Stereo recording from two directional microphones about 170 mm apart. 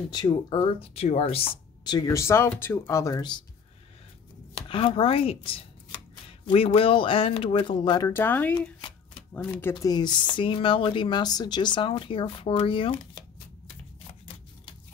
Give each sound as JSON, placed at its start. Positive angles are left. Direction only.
{"t": 0.1, "sound": "speech", "side_deg": 25}
{"t": 4.6, "sound": "speech", "side_deg": 30}
{"t": 8.1, "sound": "speech", "side_deg": 10}